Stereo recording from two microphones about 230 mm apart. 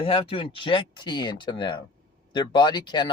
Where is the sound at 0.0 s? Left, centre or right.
Left.